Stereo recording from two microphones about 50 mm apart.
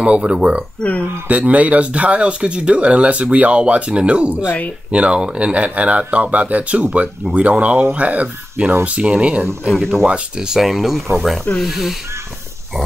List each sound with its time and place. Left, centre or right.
0.0 s speech: right
9.7 s speech: centre
10.0 s speech: right
10.5 s speech: centre